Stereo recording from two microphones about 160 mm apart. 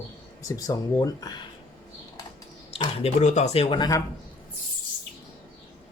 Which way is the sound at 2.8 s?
40° left (ahead or behind).